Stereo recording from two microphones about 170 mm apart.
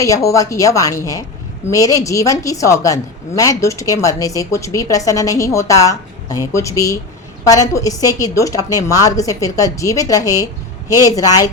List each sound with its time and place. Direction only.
0.0 s a woman's voice: 20° left (ahead or behind)